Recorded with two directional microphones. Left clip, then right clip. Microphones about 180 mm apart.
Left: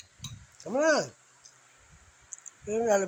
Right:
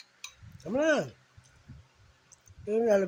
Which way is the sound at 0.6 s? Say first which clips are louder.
Left 2 dB; 30° right (ahead or behind).